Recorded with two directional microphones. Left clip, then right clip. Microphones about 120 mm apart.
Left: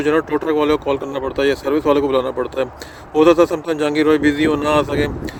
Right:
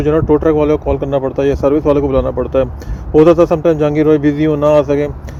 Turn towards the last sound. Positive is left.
turn(degrees=15)  # may be behind; listen again after turning